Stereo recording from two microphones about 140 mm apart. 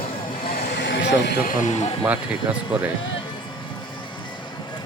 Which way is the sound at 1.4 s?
60° left (ahead or behind).